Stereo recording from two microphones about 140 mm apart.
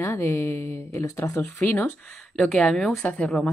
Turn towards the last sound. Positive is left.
turn(degrees=5)  # may be behind; listen again after turning